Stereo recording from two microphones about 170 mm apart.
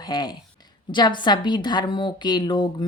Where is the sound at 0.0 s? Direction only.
25° left (ahead or behind).